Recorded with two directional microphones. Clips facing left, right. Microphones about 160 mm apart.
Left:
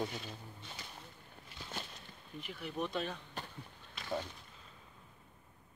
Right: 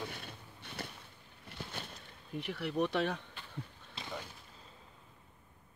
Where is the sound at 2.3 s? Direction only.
75° right (ahead or behind).